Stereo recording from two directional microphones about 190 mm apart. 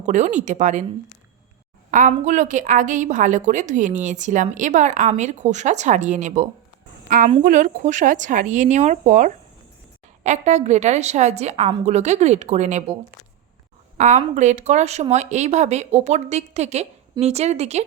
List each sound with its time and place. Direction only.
0.0 s a woman's voice: 40° right (ahead or behind)
1.9 s a woman's voice: 40° right (ahead or behind)
14.0 s a woman's voice: 40° right (ahead or behind)